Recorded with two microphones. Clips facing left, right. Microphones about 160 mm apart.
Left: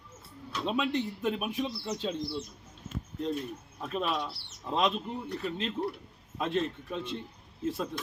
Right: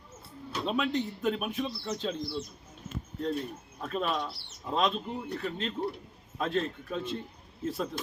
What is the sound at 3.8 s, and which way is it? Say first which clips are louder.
Speech: right 1 dB; 5° left (ahead or behind).